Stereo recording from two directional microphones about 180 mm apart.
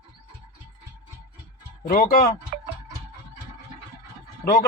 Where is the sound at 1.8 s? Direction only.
50° left (ahead or behind).